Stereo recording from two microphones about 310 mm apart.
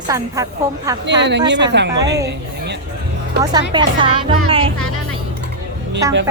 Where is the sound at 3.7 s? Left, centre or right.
Centre.